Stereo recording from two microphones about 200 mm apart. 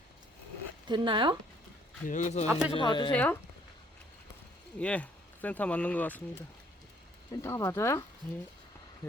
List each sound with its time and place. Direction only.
0.9 s speech: 25° right (ahead or behind)
2.0 s a man's voice: 40° left (ahead or behind)
2.5 s speech: 5° right (ahead or behind)
2.7 s speech: 25° left (ahead or behind)
3.1 s speech: 10° left (ahead or behind)
4.8 s speech: 5° left (ahead or behind)
7.4 s speech: 15° left (ahead or behind)